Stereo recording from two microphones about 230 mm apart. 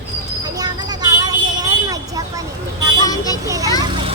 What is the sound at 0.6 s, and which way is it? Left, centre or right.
Vehicle, centre.